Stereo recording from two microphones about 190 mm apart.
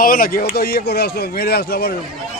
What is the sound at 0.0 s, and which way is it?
A man's voice, 50° left (ahead or behind).